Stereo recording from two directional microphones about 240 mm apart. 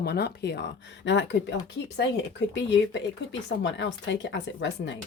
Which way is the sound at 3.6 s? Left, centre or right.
Left.